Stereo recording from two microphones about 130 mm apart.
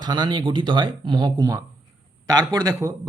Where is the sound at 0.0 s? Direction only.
35° right (ahead or behind).